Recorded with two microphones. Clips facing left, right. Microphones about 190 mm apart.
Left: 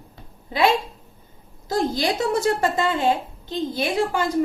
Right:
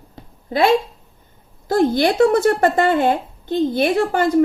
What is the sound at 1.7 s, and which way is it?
A woman's voice, 60° right (ahead or behind).